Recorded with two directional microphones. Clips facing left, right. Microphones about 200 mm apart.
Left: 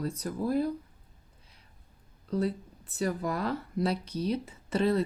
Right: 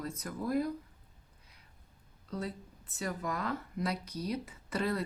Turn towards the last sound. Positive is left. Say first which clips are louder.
# left 7 dB
turn(degrees=25)  # may be behind; listen again after turning